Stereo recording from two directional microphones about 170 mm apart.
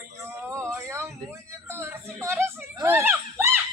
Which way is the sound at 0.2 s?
15° right (ahead or behind).